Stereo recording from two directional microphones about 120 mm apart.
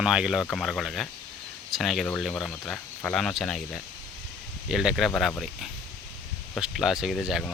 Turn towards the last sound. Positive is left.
turn(degrees=-5)  # may be behind; listen again after turning